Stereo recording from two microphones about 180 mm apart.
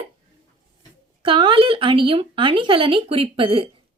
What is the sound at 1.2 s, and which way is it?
Speech, 30° right (ahead or behind).